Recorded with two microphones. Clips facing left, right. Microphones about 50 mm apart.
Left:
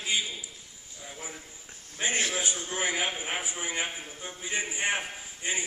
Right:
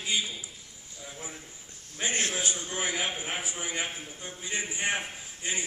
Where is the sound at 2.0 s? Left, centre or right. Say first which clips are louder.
Left 1 dB; centre.